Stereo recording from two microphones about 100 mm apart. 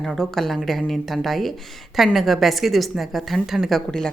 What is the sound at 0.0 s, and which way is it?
A woman's voice, 5° left (ahead or behind).